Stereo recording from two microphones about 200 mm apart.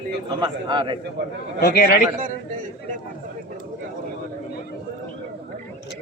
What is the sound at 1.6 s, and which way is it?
Speech, 50° left (ahead or behind).